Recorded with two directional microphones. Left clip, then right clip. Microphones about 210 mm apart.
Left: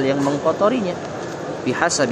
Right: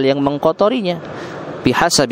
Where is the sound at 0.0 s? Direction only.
50° right (ahead or behind).